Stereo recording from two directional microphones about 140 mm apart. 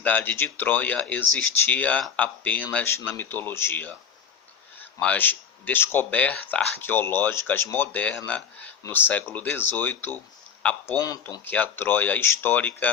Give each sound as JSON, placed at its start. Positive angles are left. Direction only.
{"t": 0.0, "sound": "speech", "side_deg": 10}
{"t": 4.9, "sound": "speech", "side_deg": 10}
{"t": 11.4, "sound": "speech", "side_deg": 15}